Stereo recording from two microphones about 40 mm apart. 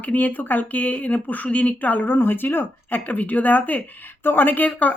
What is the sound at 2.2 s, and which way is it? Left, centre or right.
Speech, left.